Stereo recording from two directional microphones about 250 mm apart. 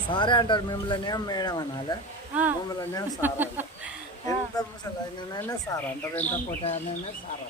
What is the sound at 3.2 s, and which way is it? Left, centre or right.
Speech, centre.